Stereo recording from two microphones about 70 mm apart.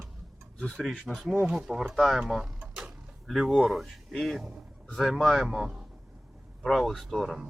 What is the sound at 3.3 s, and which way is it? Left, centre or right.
A man's voice, centre.